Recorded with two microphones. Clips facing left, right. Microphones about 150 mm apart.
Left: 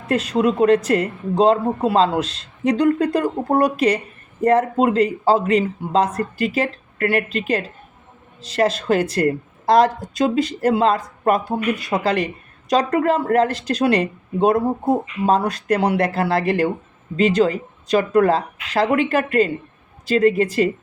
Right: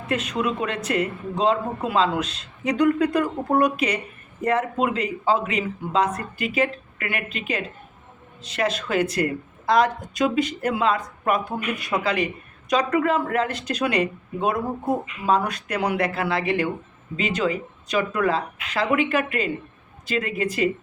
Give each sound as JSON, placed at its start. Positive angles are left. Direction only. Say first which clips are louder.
{"t": 0.1, "sound": "speech", "louder": "left 6 dB", "side_deg": 35}